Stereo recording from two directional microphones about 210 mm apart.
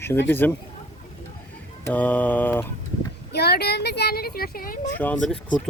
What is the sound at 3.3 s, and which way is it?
Speech, 50° left (ahead or behind).